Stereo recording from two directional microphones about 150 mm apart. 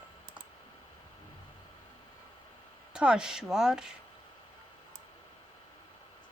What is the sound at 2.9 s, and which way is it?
Speech, 5° right (ahead or behind).